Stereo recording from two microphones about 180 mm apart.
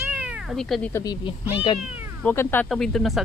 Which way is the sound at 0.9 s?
20° left (ahead or behind).